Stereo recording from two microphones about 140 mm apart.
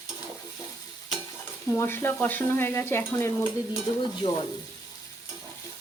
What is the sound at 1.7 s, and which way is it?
Stir, 15° left (ahead or behind).